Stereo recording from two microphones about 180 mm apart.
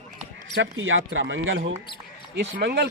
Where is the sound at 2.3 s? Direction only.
70° right (ahead or behind).